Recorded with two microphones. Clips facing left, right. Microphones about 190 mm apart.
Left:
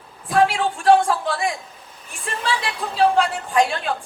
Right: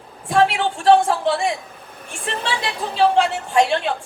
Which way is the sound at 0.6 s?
25° right (ahead or behind).